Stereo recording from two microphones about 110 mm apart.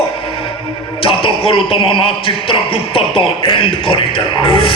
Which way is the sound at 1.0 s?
55° left (ahead or behind).